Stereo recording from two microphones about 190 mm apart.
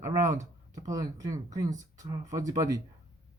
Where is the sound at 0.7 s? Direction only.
20° right (ahead or behind).